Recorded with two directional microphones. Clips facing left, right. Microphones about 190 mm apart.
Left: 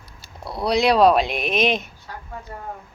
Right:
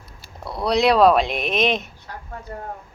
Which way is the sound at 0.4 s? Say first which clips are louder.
Right 1 dB; centre (ahead or behind).